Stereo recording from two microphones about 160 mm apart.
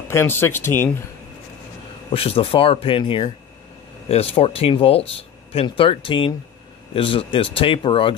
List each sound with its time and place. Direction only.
0.1 s speech: 15° left (ahead or behind)
2.0 s speech: 35° left (ahead or behind)